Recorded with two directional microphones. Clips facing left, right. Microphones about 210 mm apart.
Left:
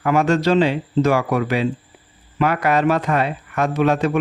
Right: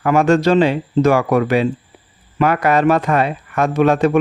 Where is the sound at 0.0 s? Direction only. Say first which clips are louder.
Right 4 dB; 50° right (ahead or behind).